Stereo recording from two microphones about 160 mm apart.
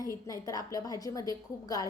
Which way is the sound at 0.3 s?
20° left (ahead or behind).